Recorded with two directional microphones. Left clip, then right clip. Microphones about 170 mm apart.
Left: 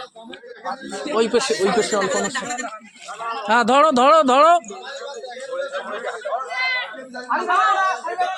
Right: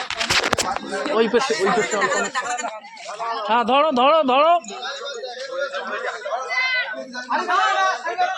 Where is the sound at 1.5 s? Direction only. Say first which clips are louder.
Even; 90° left; by 2.6 s 70° left (ahead or behind).